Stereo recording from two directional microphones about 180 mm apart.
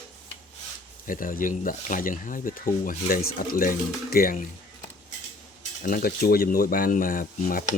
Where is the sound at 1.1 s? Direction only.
50° left (ahead or behind).